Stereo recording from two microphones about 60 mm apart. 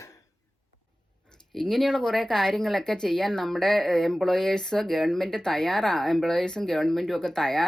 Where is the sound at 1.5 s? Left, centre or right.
Centre.